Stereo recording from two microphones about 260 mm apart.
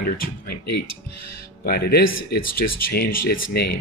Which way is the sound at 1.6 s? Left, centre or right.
Left.